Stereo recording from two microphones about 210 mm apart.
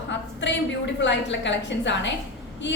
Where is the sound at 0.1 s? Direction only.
60° left (ahead or behind).